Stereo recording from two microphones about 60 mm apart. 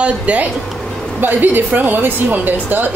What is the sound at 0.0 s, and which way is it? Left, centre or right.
A woman's voice, right.